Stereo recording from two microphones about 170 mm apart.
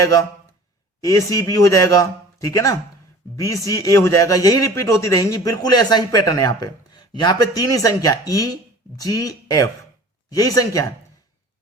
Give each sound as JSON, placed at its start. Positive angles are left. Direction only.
{"t": 0.0, "sound": "a man's voice", "side_deg": 20}